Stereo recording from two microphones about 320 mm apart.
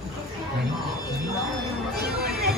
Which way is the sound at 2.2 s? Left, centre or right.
Right.